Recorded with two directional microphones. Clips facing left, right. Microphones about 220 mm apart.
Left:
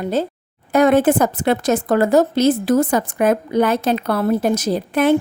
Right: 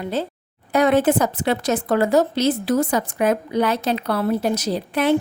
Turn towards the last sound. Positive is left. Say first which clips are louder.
# left 3 dB
turn(degrees=50)  # may be behind; listen again after turning